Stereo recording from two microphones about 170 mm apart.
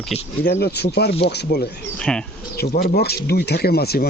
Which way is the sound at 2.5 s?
65° left (ahead or behind).